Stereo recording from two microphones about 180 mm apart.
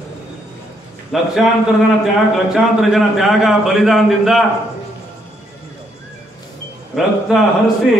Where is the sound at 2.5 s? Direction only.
Centre (ahead or behind).